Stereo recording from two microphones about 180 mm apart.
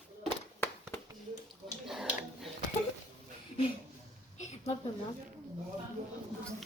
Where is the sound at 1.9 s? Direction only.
Centre (ahead or behind).